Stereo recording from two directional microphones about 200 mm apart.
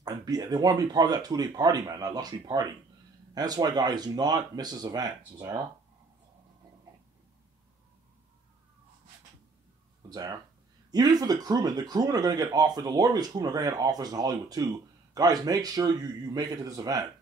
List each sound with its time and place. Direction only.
0.0 s speech: 20° right (ahead or behind)
10.0 s speech: 20° right (ahead or behind)